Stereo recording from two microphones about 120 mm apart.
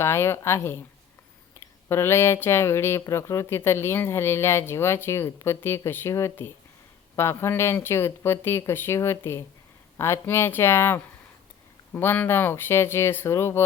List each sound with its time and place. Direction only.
0.0 s speech: 20° left (ahead or behind)
1.9 s speech: 20° left (ahead or behind)